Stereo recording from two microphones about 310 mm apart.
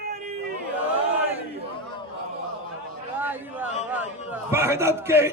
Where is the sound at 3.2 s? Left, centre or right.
Centre.